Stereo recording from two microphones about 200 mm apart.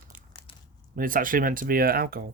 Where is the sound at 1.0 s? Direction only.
45° right (ahead or behind).